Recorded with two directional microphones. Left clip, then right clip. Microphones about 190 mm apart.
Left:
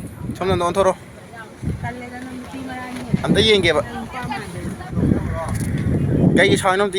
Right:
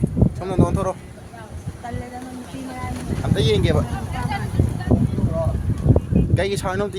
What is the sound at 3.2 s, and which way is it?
Speech, 30° left (ahead or behind).